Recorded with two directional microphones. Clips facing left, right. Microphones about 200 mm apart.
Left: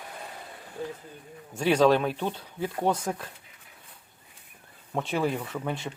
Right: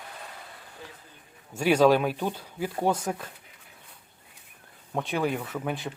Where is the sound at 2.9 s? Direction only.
25° right (ahead or behind).